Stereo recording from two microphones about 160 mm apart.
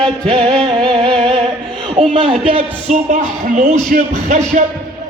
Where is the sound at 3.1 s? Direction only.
55° right (ahead or behind).